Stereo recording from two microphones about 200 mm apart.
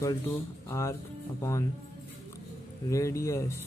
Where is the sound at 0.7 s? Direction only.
15° left (ahead or behind).